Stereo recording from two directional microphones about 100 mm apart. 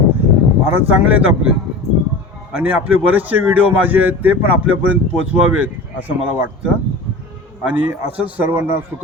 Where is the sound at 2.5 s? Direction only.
10° right (ahead or behind).